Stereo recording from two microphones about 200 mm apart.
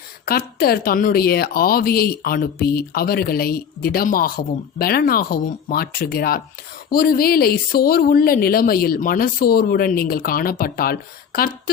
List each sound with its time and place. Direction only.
0.3 s speech: 50° left (ahead or behind)